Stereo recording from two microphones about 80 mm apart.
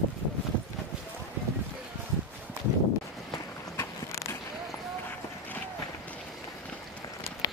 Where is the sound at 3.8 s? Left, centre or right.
Left.